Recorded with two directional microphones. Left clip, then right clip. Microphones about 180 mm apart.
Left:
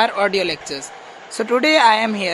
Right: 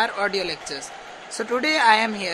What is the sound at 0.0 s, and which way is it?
Speech, 15° left (ahead or behind).